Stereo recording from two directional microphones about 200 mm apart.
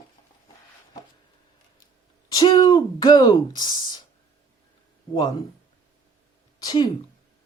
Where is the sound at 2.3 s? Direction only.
20° left (ahead or behind).